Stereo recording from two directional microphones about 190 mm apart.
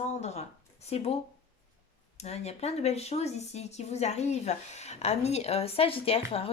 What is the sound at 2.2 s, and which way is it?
Speech, 35° left (ahead or behind).